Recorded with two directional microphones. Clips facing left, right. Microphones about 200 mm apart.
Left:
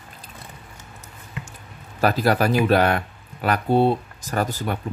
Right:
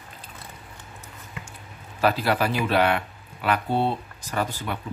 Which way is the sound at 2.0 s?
40° left (ahead or behind).